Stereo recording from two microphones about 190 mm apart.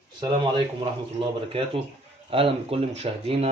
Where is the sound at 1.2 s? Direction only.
25° right (ahead or behind).